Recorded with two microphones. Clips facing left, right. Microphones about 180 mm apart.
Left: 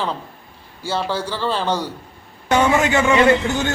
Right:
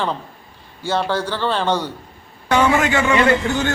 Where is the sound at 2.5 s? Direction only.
25° left (ahead or behind).